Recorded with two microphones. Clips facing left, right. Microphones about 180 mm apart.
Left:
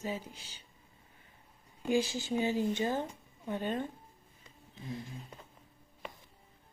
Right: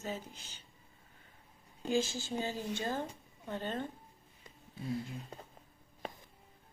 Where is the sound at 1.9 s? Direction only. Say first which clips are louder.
Left 3 dB; 15° left (ahead or behind).